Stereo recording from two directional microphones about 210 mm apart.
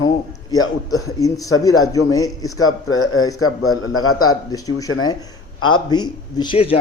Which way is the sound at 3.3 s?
90° left.